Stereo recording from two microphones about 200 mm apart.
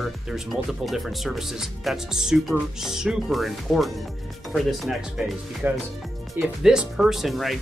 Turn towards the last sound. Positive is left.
turn(degrees=0)  # may be behind; listen again after turning